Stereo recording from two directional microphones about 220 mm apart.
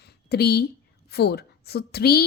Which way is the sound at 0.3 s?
45° left (ahead or behind).